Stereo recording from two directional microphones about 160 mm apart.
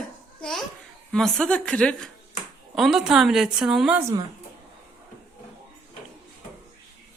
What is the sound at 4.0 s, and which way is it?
Speech, 20° right (ahead or behind).